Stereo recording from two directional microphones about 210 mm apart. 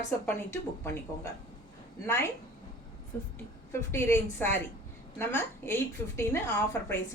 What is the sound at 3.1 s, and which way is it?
A woman's voice, 10° left (ahead or behind).